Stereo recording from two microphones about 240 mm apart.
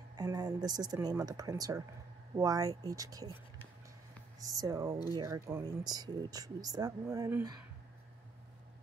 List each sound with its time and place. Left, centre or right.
0.1 s speech: centre
4.4 s speech: centre